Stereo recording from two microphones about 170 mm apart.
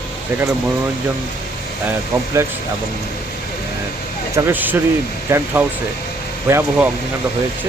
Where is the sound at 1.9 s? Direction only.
15° right (ahead or behind).